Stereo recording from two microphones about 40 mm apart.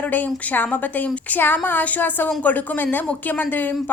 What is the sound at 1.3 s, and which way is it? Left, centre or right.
A woman's voice, left.